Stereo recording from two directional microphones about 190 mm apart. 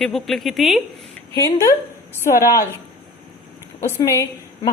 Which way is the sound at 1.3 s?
15° left (ahead or behind).